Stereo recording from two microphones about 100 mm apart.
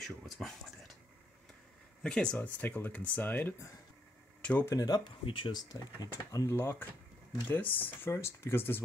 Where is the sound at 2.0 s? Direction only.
5° left (ahead or behind).